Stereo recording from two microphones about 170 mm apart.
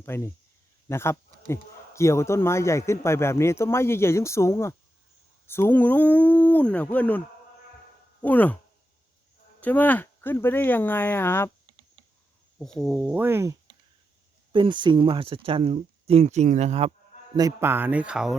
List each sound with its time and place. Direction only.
0.0 s speech: 15° left (ahead or behind)
8.2 s speech: 10° left (ahead or behind)
9.6 s speech: 10° left (ahead or behind)
12.5 s speech: centre (ahead or behind); by 13.6 s 15° right (ahead or behind)
14.5 s speech: 30° right (ahead or behind)
17.3 s speech: 15° right (ahead or behind)